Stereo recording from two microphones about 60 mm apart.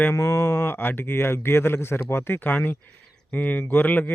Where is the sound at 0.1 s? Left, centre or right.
Left.